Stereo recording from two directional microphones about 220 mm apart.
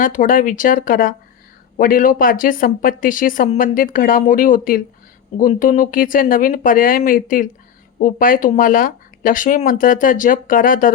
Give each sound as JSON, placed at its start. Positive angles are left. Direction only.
{"t": 0.0, "sound": "speech", "side_deg": 35}